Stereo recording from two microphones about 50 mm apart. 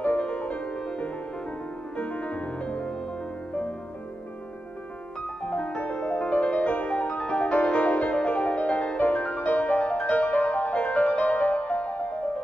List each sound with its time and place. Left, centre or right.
0.2 s music: left
0.7 s music: centre
2.0 s music: left
5.4 s music: centre